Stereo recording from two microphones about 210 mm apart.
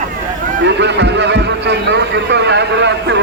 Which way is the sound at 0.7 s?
55° right (ahead or behind).